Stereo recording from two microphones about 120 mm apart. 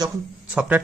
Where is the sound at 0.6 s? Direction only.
10° right (ahead or behind).